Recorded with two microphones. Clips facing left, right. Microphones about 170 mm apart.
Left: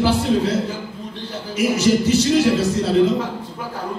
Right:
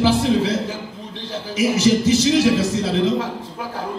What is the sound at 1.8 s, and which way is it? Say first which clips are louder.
Speech: right 1 dB; 90° right.